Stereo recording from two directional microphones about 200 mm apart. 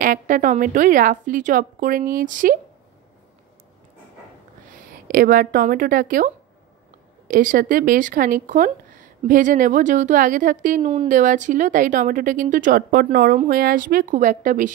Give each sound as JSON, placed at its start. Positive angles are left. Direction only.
{"t": 0.0, "sound": "a woman's voice", "side_deg": -45}
{"t": 5.0, "sound": "a woman's voice", "side_deg": -45}